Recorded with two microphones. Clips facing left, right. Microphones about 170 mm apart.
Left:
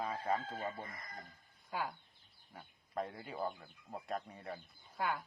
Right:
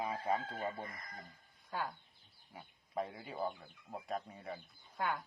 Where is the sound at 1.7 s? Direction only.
10° left (ahead or behind).